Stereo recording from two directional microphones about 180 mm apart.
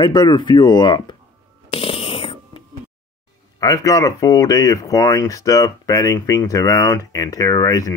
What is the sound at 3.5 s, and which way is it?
Speech, 20° left (ahead or behind).